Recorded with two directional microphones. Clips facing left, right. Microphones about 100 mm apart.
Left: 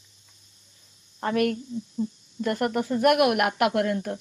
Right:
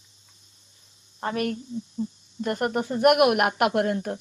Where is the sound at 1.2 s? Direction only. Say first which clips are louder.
Left 3 dB; 30° right (ahead or behind).